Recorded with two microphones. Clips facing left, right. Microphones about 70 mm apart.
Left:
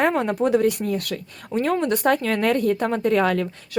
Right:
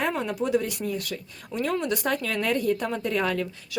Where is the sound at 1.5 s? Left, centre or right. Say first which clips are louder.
Left 5 dB; left.